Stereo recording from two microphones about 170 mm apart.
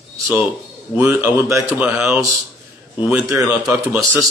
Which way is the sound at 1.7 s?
5° right (ahead or behind).